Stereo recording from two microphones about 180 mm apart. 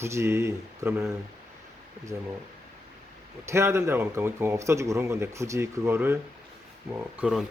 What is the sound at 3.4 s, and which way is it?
A man's voice, 15° right (ahead or behind).